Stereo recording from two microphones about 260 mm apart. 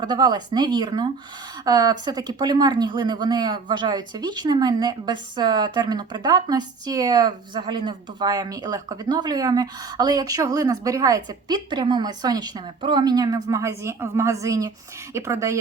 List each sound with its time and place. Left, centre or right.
0.0 s speech: centre